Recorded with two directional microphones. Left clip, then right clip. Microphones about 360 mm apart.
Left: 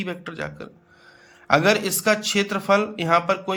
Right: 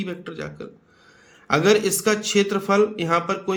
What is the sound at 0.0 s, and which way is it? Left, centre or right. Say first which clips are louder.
Speech: left 1 dB; centre.